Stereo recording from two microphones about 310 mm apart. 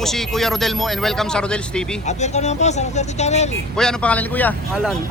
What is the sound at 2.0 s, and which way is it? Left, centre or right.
Speech, left.